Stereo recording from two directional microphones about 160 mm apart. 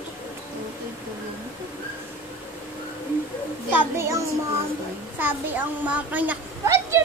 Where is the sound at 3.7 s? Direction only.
15° right (ahead or behind).